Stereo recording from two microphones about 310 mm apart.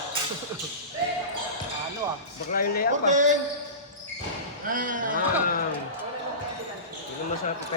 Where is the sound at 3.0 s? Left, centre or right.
Right.